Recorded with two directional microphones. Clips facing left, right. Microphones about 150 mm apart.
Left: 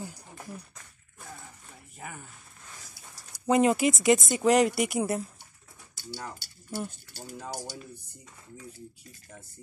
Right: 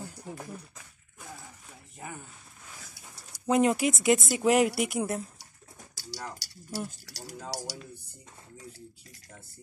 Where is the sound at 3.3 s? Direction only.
Centre (ahead or behind).